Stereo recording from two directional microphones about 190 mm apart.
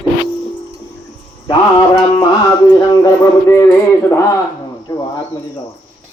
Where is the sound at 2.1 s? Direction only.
20° left (ahead or behind).